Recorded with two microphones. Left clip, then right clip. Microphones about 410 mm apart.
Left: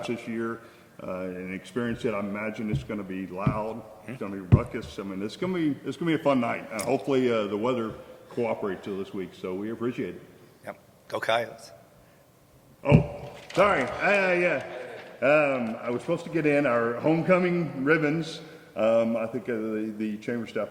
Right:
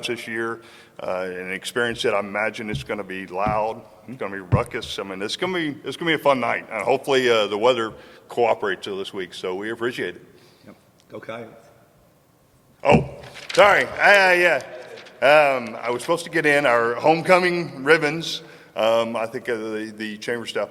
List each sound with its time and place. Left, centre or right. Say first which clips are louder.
0.0 s speech: right 6 dB; right
11.1 s a man's voice: left 8 dB; left
13.6 s a man's voice: right 8 dB; right